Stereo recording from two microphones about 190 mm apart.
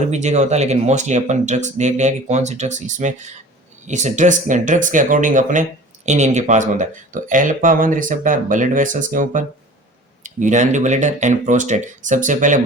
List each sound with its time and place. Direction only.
0.1 s speech: 35° right (ahead or behind)